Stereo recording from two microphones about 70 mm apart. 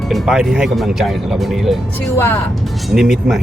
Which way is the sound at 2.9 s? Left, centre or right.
Centre.